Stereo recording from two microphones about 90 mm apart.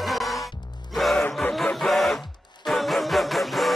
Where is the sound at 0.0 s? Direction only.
Centre (ahead or behind).